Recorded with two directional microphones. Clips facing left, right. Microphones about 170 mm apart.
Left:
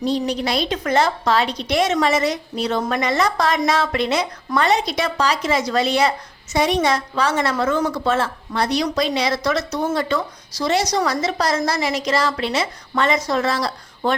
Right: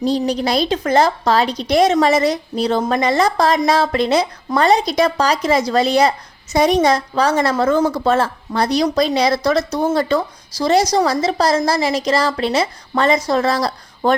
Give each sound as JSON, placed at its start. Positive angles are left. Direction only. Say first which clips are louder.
{"t": 0.0, "sound": "speech", "louder": "right 3 dB", "side_deg": -35}